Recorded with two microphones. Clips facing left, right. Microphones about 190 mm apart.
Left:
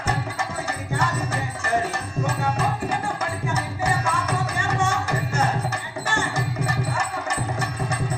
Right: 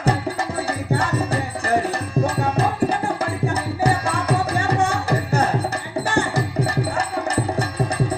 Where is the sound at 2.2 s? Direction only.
35° right (ahead or behind).